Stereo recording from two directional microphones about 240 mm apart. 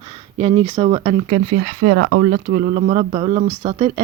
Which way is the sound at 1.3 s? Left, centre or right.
Right.